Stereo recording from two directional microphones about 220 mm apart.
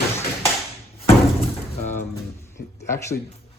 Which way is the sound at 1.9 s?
10° left (ahead or behind).